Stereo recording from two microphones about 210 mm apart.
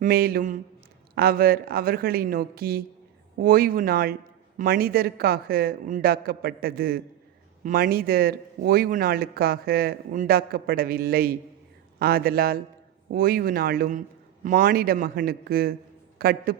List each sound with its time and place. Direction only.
0.0 s a man's voice: 45° right (ahead or behind)